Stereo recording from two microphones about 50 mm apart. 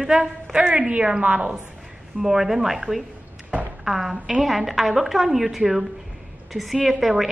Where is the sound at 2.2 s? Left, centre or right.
Centre.